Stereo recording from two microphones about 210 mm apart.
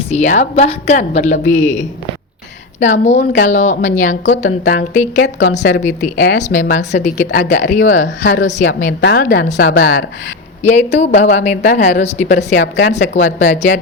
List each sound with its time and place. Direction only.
0.1 s a woman's voice: 35° left (ahead or behind)
2.8 s a woman's voice: 35° left (ahead or behind)
9.7 s speech: 60° left (ahead or behind)
10.6 s a woman's voice: 35° left (ahead or behind)